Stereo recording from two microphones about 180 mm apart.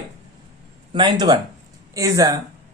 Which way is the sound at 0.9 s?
25° right (ahead or behind).